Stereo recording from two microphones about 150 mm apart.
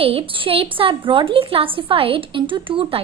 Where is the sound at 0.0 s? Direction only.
40° right (ahead or behind).